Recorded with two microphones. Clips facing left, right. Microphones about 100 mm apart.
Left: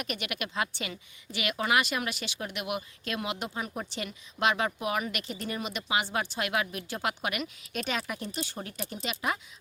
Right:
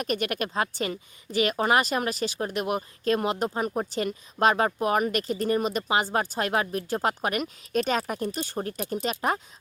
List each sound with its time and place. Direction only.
0.0 s a woman's voice: 40° right (ahead or behind)